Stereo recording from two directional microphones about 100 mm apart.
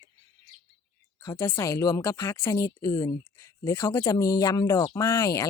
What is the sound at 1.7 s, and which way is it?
Speech, 35° left (ahead or behind).